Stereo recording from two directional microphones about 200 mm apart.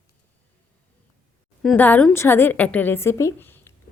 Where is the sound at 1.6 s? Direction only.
10° left (ahead or behind).